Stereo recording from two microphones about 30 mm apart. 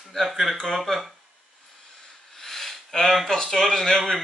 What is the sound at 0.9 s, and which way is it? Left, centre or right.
Speech, centre.